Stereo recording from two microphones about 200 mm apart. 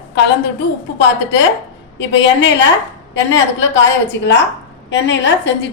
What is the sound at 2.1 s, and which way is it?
Speech, 65° left (ahead or behind).